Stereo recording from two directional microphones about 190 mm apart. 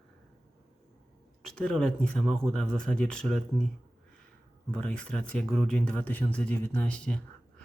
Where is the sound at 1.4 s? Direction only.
5° left (ahead or behind).